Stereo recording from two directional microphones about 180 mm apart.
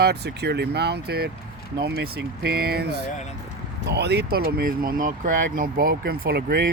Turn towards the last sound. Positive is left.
turn(degrees=-60)  # may be behind; listen again after turning